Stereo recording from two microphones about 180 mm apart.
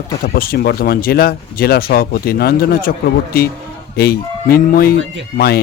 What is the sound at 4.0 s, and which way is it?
A man's voice, 55° left (ahead or behind).